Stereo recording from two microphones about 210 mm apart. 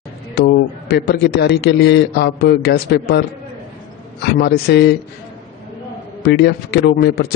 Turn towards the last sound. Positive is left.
turn(degrees=50)  # may be behind; listen again after turning